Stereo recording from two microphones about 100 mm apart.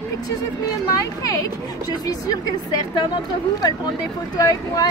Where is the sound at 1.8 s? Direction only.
40° left (ahead or behind).